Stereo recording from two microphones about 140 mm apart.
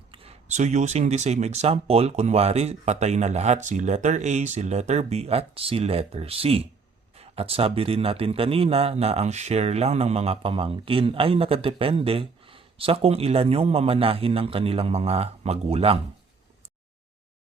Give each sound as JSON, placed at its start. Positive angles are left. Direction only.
{"t": 0.1, "sound": "speech", "side_deg": -45}